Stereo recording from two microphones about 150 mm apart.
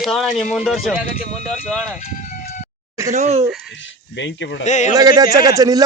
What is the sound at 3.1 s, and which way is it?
Speech, 50° right (ahead or behind).